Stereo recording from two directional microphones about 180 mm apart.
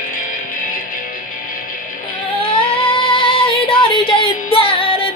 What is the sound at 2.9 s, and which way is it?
Music, 30° left (ahead or behind).